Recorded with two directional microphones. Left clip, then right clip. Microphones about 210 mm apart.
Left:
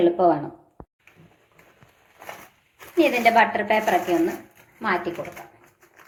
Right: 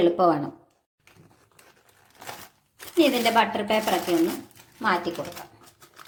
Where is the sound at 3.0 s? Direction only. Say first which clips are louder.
Left 3 dB; 50° right (ahead or behind).